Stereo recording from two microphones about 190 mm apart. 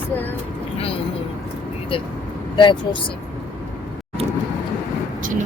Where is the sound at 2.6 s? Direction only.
25° left (ahead or behind).